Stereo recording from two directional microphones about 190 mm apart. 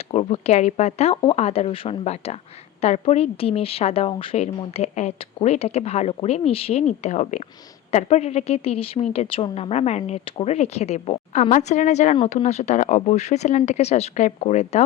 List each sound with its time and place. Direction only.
0.1 s a woman's voice: 35° left (ahead or behind)
12.1 s a woman's voice: 30° left (ahead or behind)